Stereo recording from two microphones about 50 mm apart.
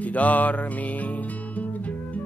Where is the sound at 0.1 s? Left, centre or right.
Left.